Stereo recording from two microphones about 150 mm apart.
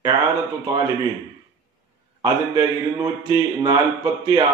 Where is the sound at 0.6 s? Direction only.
25° right (ahead or behind).